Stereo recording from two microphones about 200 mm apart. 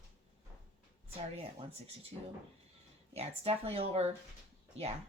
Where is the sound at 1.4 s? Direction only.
30° right (ahead or behind).